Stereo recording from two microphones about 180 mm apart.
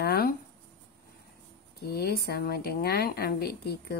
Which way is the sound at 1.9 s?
60° left (ahead or behind).